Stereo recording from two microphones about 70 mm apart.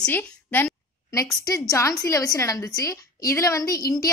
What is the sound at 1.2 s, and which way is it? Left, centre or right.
A woman's voice, left.